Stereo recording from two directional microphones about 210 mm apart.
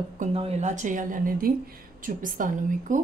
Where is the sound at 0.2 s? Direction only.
30° right (ahead or behind).